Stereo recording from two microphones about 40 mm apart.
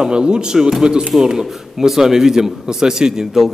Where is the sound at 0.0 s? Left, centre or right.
Right.